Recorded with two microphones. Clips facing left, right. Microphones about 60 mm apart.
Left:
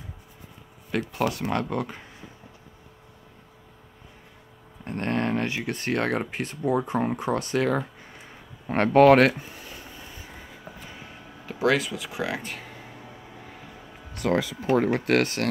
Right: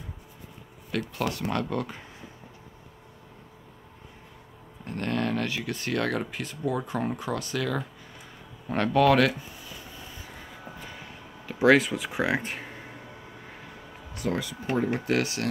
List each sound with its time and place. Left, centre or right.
0.9 s speech: centre
1.8 s speech: centre
4.8 s speech: left
11.6 s speech: centre
14.1 s speech: left
14.8 s speech: left